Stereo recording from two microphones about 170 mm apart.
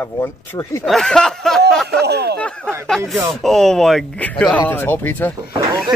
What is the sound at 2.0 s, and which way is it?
Speech, 75° right (ahead or behind).